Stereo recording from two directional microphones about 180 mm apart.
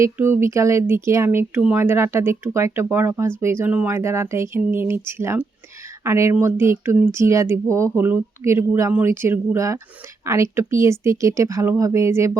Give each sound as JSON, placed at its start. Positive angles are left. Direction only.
{"t": 0.0, "sound": "speech", "side_deg": -15}